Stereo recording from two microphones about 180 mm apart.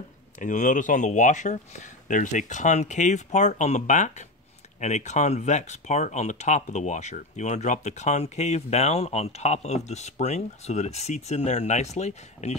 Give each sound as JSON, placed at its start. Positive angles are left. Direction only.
{"t": 0.4, "sound": "speech", "side_deg": 45}